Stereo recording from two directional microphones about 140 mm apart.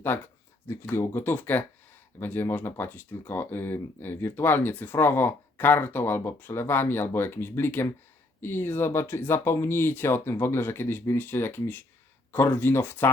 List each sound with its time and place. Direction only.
0.1 s speech: 15° left (ahead or behind)